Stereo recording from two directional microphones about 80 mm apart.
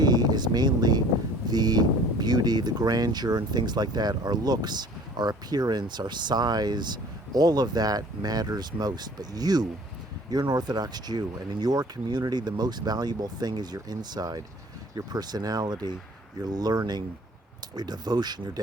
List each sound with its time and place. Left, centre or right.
0.0 s speech: right